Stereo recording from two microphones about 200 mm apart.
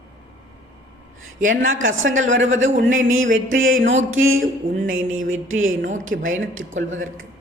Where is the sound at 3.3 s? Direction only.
80° right.